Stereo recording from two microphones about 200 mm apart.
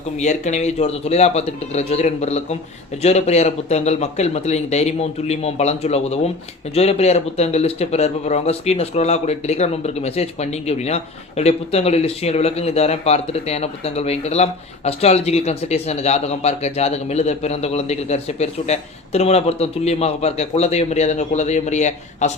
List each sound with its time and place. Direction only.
0.2 s speech: 35° left (ahead or behind)